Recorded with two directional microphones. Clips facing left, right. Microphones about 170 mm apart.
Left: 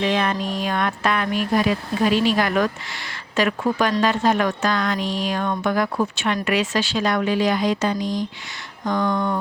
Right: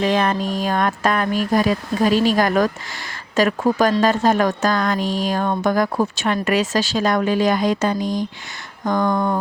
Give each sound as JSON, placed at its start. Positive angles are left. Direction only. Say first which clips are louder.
{"t": 0.0, "sound": "speech", "louder": "right 3 dB", "side_deg": -40}